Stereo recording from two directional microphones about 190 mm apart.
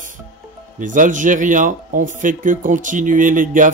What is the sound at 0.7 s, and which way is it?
Speech, 45° right (ahead or behind).